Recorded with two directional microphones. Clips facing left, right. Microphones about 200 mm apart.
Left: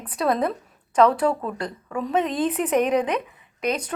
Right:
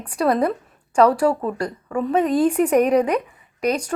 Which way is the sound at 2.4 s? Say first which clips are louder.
Right 6 dB; 45° right (ahead or behind).